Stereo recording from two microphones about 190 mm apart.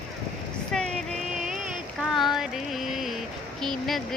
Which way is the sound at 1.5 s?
Centre (ahead or behind).